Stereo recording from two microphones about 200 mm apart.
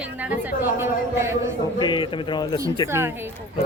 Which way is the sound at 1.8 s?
25° left (ahead or behind).